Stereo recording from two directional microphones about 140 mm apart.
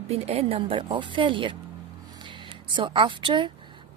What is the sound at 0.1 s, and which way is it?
Speech, 45° right (ahead or behind).